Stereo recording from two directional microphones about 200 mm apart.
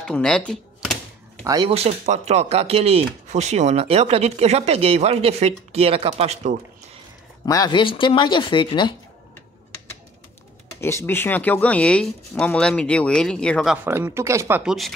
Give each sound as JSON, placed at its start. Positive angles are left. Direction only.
{"t": 0.0, "sound": "typewriter", "side_deg": 5}
{"t": 1.4, "sound": "speech", "side_deg": -20}
{"t": 1.7, "sound": "speech", "side_deg": -30}
{"t": 7.4, "sound": "speech", "side_deg": 20}
{"t": 10.8, "sound": "speech", "side_deg": 10}
{"t": 13.8, "sound": "speech", "side_deg": -10}